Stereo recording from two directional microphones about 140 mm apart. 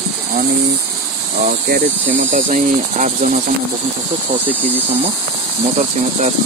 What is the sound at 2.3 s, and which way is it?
Cricket, 60° right (ahead or behind).